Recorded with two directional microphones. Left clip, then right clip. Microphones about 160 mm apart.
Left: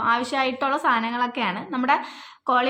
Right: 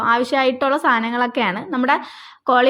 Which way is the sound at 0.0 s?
30° right (ahead or behind).